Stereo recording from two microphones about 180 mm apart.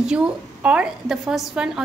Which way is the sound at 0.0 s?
5° right (ahead or behind).